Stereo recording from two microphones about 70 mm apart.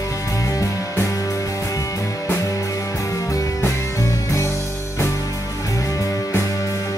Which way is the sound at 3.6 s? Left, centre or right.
Left.